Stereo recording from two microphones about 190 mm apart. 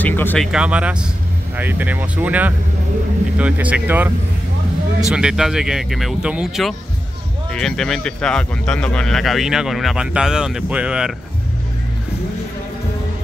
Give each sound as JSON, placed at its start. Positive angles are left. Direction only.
{"t": 0.0, "sound": "speech", "side_deg": 10}
{"t": 0.5, "sound": "speech", "side_deg": -5}
{"t": 5.1, "sound": "speech", "side_deg": -5}